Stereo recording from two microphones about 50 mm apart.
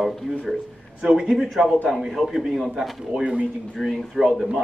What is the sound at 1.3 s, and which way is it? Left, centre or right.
A man's voice, centre.